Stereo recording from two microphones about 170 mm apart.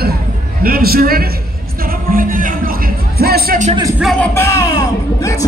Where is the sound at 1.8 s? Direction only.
55° right (ahead or behind).